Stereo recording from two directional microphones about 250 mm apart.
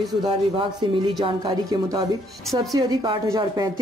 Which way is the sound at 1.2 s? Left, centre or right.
Centre.